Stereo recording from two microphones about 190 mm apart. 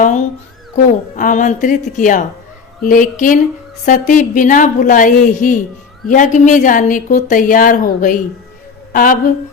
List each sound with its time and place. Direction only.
0.0 s a woman's voice: 40° left (ahead or behind)